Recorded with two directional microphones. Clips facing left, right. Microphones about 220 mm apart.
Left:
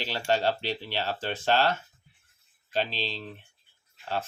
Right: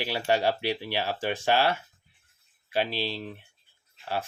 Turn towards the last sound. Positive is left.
turn(degrees=-10)  # may be behind; listen again after turning